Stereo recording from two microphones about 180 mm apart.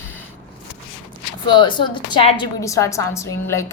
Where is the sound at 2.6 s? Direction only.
15° left (ahead or behind).